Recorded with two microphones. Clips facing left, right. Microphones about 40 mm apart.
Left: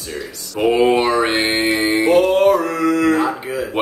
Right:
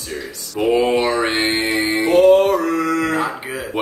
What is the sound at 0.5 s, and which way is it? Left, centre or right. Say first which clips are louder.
Speech: left 2 dB; centre.